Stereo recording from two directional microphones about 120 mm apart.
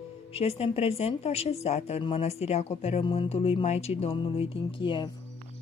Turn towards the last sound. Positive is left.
turn(degrees=40)  # may be behind; listen again after turning